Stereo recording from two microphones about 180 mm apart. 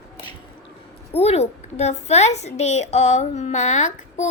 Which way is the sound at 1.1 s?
35° left (ahead or behind).